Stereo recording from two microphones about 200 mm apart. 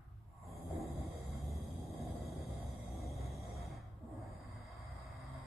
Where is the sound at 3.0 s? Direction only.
Centre (ahead or behind).